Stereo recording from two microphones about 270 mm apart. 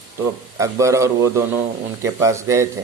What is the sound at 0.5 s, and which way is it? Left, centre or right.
Speech, centre.